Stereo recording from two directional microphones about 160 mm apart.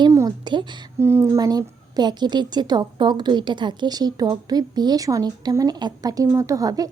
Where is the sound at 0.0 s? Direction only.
20° right (ahead or behind).